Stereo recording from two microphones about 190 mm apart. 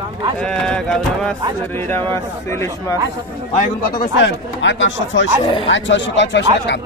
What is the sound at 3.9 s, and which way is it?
A man's voice, 70° left (ahead or behind).